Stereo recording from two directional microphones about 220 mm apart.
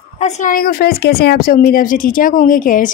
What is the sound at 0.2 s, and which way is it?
A woman's voice, 35° left (ahead or behind).